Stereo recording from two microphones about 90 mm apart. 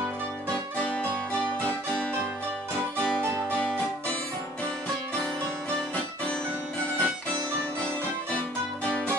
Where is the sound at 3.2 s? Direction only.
25° right (ahead or behind).